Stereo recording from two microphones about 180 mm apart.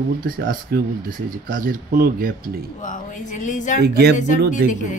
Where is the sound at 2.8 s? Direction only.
45° left (ahead or behind).